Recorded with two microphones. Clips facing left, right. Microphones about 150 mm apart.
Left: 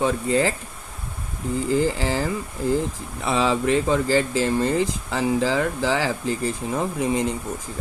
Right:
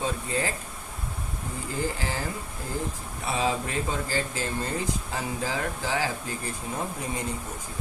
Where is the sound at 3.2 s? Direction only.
90° left.